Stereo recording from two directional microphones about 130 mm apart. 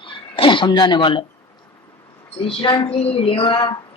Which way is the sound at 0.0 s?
40° left (ahead or behind).